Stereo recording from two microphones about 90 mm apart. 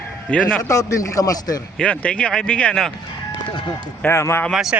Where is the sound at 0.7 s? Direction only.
35° left (ahead or behind).